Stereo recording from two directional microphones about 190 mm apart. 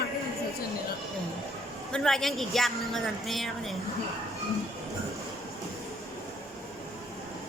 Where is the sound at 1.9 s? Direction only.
Centre (ahead or behind).